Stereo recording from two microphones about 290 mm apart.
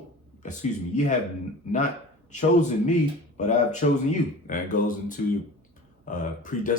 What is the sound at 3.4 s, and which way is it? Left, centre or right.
Speech, left.